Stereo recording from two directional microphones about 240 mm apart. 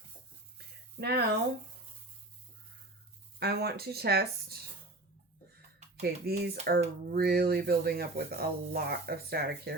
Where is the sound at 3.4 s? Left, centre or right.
Right.